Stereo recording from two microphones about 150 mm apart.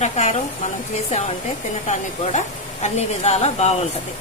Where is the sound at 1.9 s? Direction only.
50° left (ahead or behind).